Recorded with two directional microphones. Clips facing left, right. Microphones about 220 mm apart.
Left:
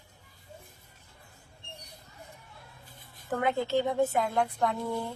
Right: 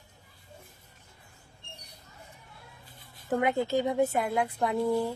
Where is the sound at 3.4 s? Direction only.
20° right (ahead or behind).